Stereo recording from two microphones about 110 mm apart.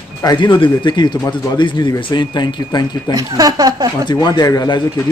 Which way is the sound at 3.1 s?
35° right (ahead or behind).